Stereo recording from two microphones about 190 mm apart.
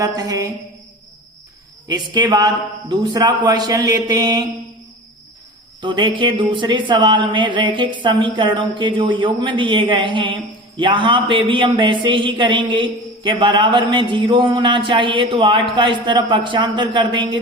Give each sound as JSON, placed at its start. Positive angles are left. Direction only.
{"t": 0.0, "sound": "speech", "side_deg": -20}
{"t": 1.9, "sound": "speech", "side_deg": -25}
{"t": 5.8, "sound": "speech", "side_deg": -25}